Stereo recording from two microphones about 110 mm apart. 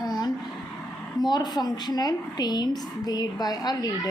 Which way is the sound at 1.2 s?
40° left (ahead or behind).